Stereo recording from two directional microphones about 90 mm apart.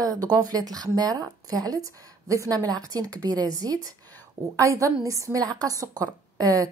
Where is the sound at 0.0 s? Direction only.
45° right (ahead or behind).